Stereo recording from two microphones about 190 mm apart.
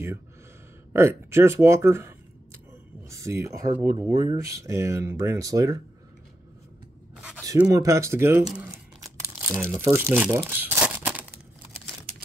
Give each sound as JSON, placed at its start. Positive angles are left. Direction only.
{"t": 0.9, "sound": "speech", "side_deg": -15}
{"t": 7.7, "sound": "speech", "side_deg": -15}